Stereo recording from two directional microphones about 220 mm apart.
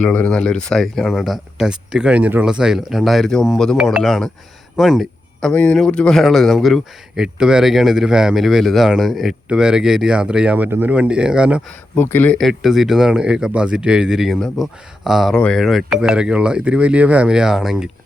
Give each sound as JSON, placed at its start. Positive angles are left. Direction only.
{"t": 0.0, "sound": "speech", "side_deg": 5}
{"t": 11.9, "sound": "speech", "side_deg": 10}